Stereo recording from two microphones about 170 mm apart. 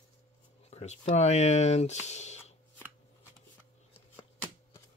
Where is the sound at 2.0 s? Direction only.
40° left (ahead or behind).